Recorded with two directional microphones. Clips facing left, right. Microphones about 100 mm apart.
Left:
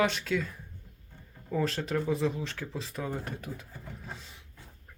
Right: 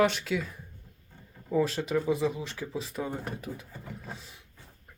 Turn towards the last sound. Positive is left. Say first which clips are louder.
# right 1 dB
turn(degrees=-5)  # may be behind; listen again after turning